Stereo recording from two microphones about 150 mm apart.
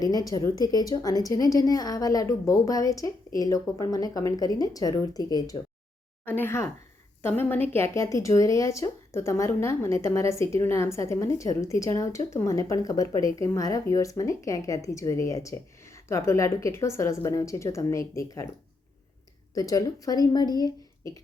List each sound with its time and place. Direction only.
0.0 s a woman's voice: 25° left (ahead or behind)
6.2 s a woman's voice: 15° left (ahead or behind)
19.5 s a woman's voice: 25° left (ahead or behind)